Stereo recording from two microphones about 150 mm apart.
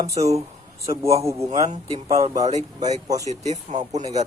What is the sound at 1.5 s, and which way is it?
Speech, 45° right (ahead or behind).